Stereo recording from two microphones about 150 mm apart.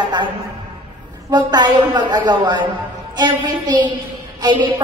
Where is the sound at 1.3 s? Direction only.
30° right (ahead or behind).